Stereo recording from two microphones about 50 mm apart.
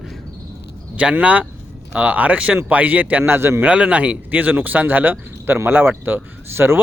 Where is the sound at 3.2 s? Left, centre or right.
Right.